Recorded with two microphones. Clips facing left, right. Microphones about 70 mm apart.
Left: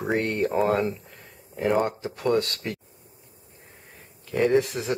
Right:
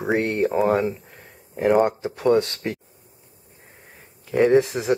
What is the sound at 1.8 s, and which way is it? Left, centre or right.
Speech, right.